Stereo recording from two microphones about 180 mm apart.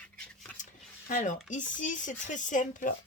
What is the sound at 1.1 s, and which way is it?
Speech, 45° left (ahead or behind).